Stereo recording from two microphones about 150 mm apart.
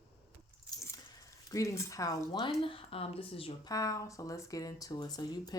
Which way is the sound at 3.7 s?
20° left (ahead or behind).